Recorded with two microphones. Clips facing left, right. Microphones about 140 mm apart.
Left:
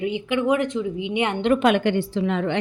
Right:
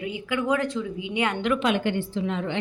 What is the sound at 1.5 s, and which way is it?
A woman's voice, 55° left (ahead or behind).